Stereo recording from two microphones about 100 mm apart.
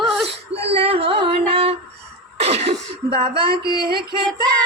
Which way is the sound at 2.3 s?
90° right.